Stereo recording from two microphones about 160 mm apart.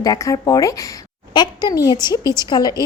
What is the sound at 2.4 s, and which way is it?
Speech, 25° left (ahead or behind).